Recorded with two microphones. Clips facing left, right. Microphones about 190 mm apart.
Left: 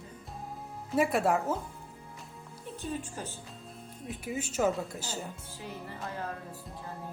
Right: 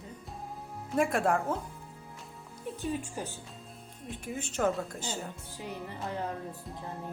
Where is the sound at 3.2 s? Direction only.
15° right (ahead or behind).